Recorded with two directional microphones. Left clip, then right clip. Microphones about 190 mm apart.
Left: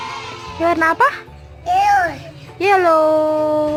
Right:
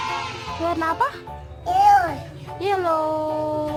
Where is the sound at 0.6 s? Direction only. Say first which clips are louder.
Left 8 dB; 25° left (ahead or behind).